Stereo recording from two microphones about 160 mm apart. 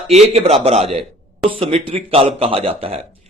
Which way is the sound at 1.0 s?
Centre (ahead or behind).